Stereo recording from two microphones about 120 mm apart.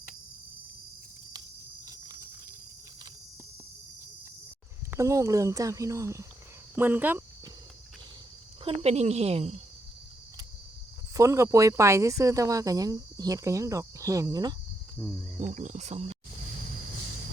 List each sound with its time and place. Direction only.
4.9 s speech: 25° right (ahead or behind)
8.6 s a woman's voice: 55° right (ahead or behind)
11.1 s speech: 25° right (ahead or behind)
15.4 s speech: 90° right